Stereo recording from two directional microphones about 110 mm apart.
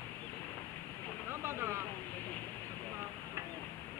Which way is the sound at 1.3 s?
20° right (ahead or behind).